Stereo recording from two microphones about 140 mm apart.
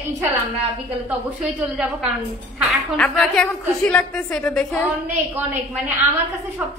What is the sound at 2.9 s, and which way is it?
A woman's voice, 5° left (ahead or behind).